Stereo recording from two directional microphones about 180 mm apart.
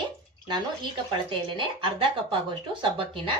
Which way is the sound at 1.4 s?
30° right (ahead or behind).